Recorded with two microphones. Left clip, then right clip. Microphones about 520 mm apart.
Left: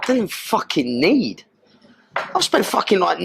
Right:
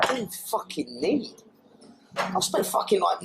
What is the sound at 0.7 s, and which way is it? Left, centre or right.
Speech, left.